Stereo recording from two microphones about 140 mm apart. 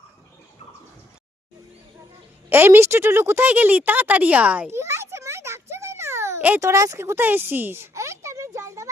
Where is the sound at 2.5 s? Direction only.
15° right (ahead or behind).